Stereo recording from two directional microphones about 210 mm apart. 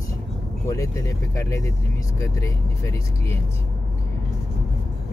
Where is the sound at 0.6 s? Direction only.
15° left (ahead or behind).